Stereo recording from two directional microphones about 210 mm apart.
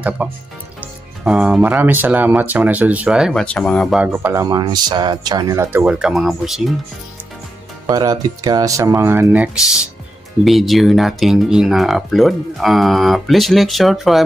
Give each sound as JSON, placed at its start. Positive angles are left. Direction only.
{"t": 0.2, "sound": "speech", "side_deg": -5}
{"t": 7.8, "sound": "speech", "side_deg": -15}